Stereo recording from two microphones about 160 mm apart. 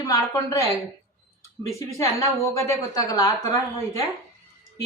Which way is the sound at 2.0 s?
20° left (ahead or behind).